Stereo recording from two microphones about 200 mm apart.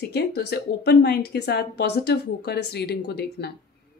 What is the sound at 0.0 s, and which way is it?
Speech, 55° left (ahead or behind).